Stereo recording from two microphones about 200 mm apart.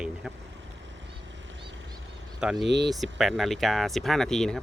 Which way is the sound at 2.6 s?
60° right (ahead or behind).